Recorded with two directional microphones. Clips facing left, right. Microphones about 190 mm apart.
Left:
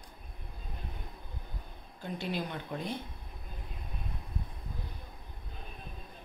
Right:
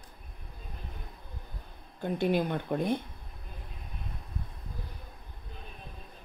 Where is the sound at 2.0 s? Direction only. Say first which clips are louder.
Right 8 dB; 55° right (ahead or behind).